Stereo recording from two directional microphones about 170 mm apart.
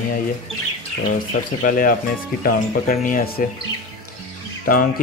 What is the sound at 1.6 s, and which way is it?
Speech, 55° left (ahead or behind).